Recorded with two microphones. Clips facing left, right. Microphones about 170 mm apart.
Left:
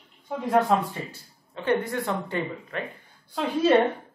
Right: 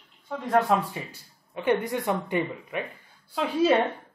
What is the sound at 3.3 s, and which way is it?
Speech, 5° right (ahead or behind).